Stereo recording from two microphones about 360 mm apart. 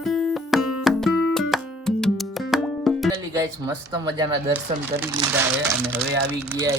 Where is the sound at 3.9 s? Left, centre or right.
Centre.